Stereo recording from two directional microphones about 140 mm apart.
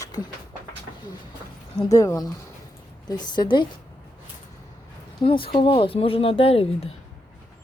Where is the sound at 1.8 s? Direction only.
25° left (ahead or behind).